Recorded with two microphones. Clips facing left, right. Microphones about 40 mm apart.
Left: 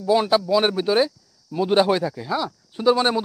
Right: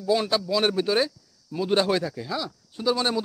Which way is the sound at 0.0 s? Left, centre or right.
Centre.